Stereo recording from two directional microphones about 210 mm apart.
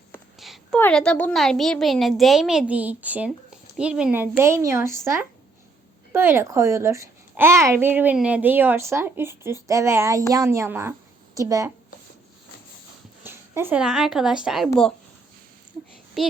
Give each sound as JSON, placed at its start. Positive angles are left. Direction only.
{"t": 0.3, "sound": "a sound", "side_deg": 0}
{"t": 0.8, "sound": "a woman's voice", "side_deg": 5}
{"t": 6.1, "sound": "a child's voice", "side_deg": -10}
{"t": 13.2, "sound": "speech", "side_deg": -10}